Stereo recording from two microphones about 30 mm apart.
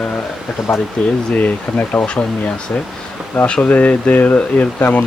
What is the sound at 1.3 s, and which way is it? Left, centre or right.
Speech, left.